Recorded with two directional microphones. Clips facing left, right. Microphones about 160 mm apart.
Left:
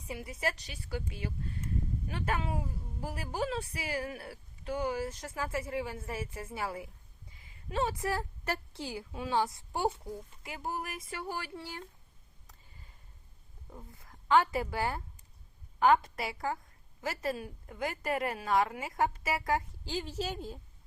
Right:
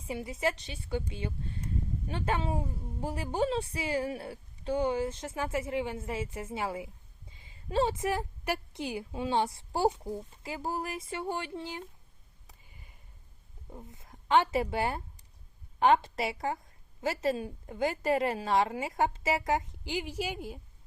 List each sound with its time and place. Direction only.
0.0 s speech: 25° right (ahead or behind)
13.7 s speech: 20° right (ahead or behind)